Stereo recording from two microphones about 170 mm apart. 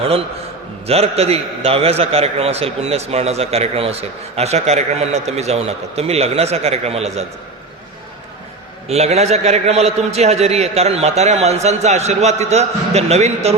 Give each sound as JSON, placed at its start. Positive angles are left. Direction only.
{"t": 0.9, "sound": "a man's voice", "side_deg": -35}
{"t": 8.9, "sound": "a man's voice", "side_deg": -40}